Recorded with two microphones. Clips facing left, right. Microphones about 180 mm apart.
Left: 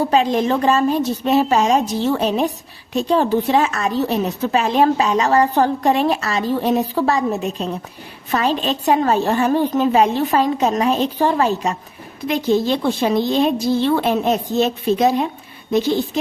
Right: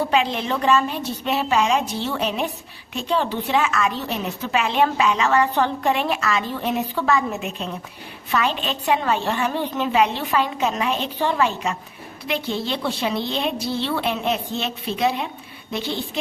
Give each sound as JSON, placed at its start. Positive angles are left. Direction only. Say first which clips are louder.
{"t": 0.0, "sound": "a woman's voice", "louder": "left 5 dB", "side_deg": 40}